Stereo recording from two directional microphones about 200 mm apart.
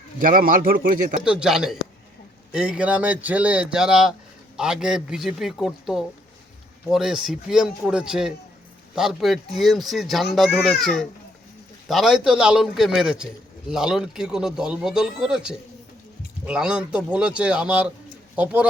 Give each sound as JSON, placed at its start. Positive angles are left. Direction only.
{"t": 0.2, "sound": "a man's voice", "side_deg": -45}
{"t": 1.2, "sound": "speech", "side_deg": -5}